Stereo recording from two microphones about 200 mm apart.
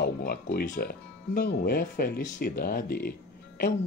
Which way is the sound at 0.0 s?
50° left (ahead or behind).